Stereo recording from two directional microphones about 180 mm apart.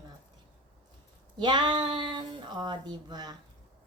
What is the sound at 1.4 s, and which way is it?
Speech, 25° right (ahead or behind).